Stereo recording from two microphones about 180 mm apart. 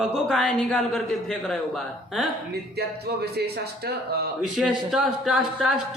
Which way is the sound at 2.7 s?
60° right (ahead or behind).